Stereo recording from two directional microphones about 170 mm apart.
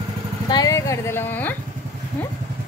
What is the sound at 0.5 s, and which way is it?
Speech, 20° left (ahead or behind).